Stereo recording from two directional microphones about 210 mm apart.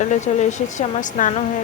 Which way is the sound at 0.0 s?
35° left (ahead or behind).